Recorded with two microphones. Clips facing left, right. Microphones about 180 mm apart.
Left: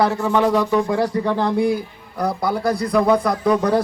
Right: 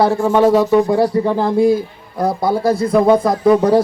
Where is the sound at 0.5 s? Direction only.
25° right (ahead or behind).